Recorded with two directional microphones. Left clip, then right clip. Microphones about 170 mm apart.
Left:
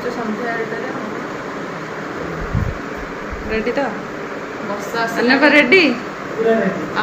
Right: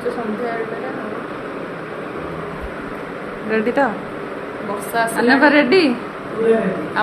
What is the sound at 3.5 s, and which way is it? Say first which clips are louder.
Speech: right 2 dB; 30° right (ahead or behind).